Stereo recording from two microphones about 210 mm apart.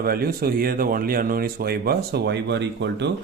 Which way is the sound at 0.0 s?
45° right (ahead or behind).